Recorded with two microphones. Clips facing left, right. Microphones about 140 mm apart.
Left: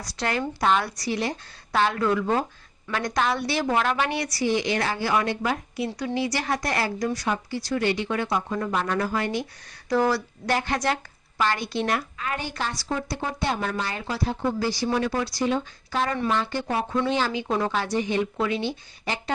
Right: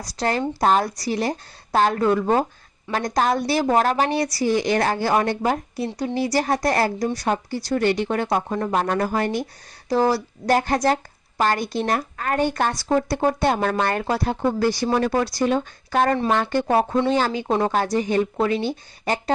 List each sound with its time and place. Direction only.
0.0 s a woman's voice: 35° right (ahead or behind)
7.3 s speech: 45° right (ahead or behind)
9.9 s a woman's voice: 35° right (ahead or behind); by 14.8 s 55° right (ahead or behind)
14.8 s speech: 40° right (ahead or behind)